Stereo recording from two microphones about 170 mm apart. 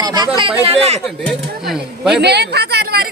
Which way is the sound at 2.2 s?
75° right (ahead or behind).